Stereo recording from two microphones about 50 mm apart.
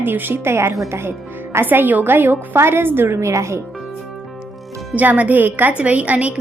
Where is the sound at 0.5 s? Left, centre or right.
Right.